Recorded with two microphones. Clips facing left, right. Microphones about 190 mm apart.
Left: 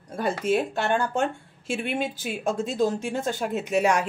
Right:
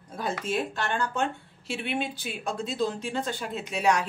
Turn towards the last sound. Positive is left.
turn(degrees=50)  # may be behind; listen again after turning